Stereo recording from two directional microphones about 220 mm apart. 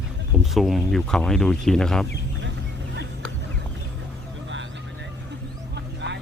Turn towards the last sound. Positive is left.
turn(degrees=-50)  # may be behind; listen again after turning